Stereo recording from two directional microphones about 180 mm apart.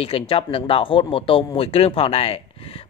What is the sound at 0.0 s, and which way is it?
Speech, 30° left (ahead or behind).